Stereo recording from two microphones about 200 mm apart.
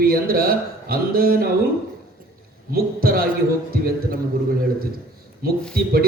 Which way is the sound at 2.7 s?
50° right (ahead or behind).